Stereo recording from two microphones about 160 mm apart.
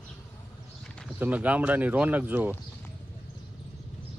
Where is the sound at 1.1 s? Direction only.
10° right (ahead or behind).